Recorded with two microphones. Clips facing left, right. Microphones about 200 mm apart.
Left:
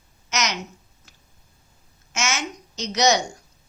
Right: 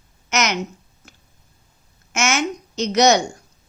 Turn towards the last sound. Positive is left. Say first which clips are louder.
# right 5 dB
turn(degrees=-55)  # may be behind; listen again after turning